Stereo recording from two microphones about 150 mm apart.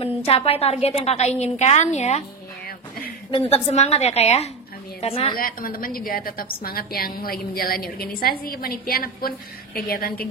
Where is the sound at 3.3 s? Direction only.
40° left (ahead or behind).